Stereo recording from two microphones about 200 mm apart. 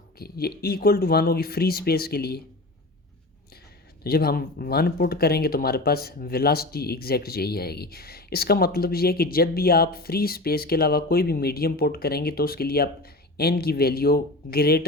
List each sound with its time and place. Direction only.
0.2 s speech: 50° left (ahead or behind)
4.0 s speech: 50° left (ahead or behind)